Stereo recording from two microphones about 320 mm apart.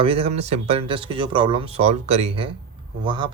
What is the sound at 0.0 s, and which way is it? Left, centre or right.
Speech, centre.